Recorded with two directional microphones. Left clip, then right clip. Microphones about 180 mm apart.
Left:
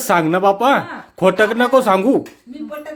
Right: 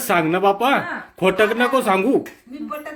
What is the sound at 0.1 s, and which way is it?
Speech, 25° left (ahead or behind).